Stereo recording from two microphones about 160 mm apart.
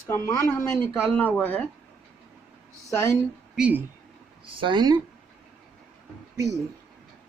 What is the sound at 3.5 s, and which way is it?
Speech, 10° right (ahead or behind).